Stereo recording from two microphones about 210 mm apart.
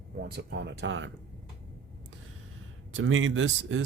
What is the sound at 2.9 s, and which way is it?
Speech, 70° right (ahead or behind).